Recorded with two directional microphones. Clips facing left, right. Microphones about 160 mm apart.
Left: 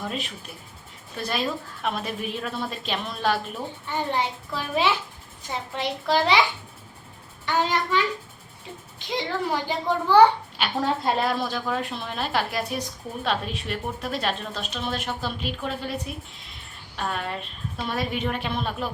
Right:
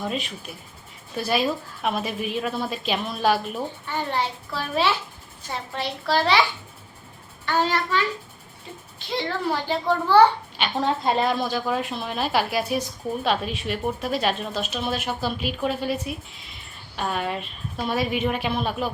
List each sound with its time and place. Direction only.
1.1 s a woman's voice: 5° right (ahead or behind)
3.9 s a child's voice: 15° left (ahead or behind)
7.4 s a child's voice: 15° left (ahead or behind)
10.6 s a woman's voice: centre (ahead or behind)